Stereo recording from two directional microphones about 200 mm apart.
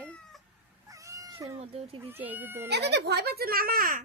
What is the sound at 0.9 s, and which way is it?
Cat, 15° right (ahead or behind).